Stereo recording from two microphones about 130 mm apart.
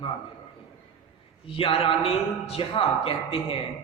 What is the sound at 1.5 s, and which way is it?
A man's voice, 45° left (ahead or behind).